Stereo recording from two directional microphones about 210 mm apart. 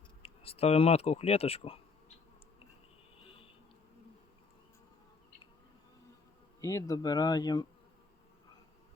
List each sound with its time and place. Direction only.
0.2 s speech: 30° left (ahead or behind)
3.2 s a sound: 25° left (ahead or behind)
6.6 s speech: 15° left (ahead or behind)